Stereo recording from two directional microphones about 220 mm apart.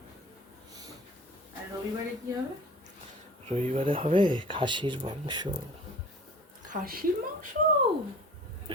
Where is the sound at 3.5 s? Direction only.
25° right (ahead or behind).